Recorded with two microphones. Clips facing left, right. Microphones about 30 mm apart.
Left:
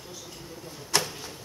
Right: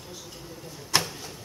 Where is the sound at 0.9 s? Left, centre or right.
Right.